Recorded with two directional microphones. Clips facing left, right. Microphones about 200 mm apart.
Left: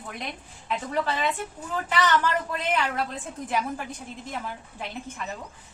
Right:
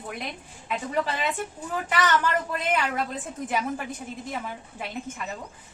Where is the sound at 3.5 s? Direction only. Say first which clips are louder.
Even; 5° right (ahead or behind).